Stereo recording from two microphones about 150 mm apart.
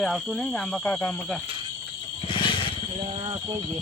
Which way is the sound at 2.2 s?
35° left (ahead or behind).